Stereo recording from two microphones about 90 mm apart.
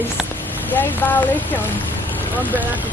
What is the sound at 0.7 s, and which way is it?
Speech, 20° left (ahead or behind).